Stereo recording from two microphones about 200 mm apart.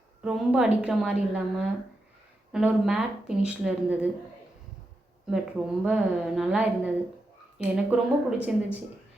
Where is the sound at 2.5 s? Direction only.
5° right (ahead or behind).